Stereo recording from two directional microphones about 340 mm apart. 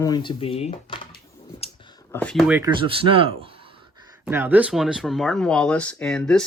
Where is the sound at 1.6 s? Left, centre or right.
Centre.